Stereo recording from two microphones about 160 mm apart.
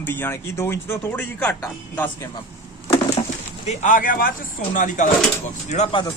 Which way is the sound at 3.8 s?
55° left (ahead or behind).